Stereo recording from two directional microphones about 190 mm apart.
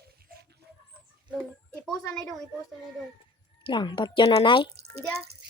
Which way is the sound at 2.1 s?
5° left (ahead or behind).